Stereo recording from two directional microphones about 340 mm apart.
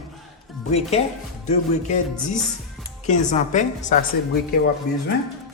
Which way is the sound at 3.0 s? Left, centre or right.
Left.